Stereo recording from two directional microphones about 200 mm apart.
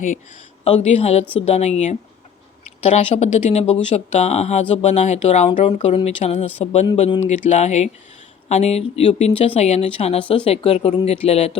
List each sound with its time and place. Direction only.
0.6 s speech: 30° left (ahead or behind)